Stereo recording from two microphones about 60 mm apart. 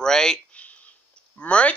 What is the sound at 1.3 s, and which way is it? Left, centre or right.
Speech, left.